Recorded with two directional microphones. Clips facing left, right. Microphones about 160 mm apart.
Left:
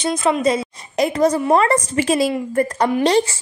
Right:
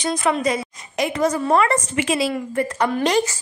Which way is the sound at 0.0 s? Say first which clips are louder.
Left 3 dB; 25° left (ahead or behind).